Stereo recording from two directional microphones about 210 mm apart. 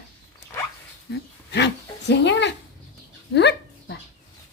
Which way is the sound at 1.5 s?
55° left (ahead or behind).